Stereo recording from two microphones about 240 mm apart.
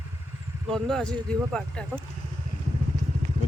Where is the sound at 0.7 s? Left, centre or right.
Centre.